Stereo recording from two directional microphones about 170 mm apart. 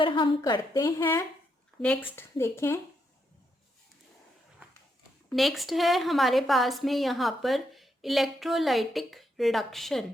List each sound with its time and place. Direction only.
0.0 s a woman's voice: 30° left (ahead or behind)
1.8 s speech: 5° left (ahead or behind)
5.3 s a woman's voice: centre (ahead or behind)